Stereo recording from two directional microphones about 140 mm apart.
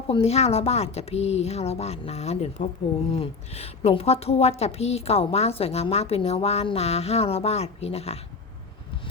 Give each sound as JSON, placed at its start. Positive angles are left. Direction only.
{"t": 0.1, "sound": "a woman's voice", "side_deg": 45}